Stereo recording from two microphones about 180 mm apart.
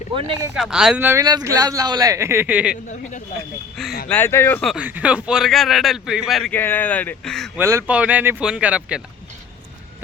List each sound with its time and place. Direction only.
0.5 s speech: 5° right (ahead or behind)
1.2 s speech: 20° right (ahead or behind)
3.8 s speech: 5° left (ahead or behind)
4.6 s speech: 5° right (ahead or behind)
7.5 s speech: 15° right (ahead or behind)